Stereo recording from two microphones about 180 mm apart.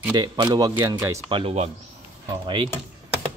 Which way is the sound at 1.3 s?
35° right (ahead or behind).